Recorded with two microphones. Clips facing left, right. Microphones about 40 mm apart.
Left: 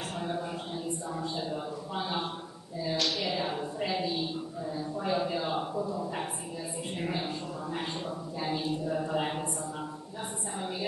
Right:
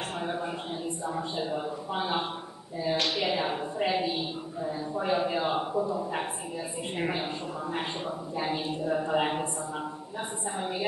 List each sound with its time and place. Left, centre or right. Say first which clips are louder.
1.1 s a man's voice: right 4 dB; right
8.4 s a woman's voice: right 1 dB; right